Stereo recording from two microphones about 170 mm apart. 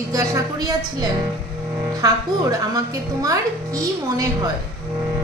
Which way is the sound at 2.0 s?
20° right (ahead or behind).